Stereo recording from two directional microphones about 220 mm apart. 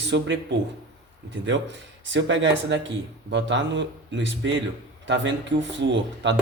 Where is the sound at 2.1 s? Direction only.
55° right (ahead or behind).